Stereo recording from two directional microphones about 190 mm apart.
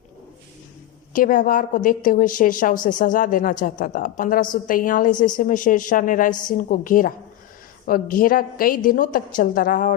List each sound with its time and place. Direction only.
1.1 s a woman's voice: 45° left (ahead or behind)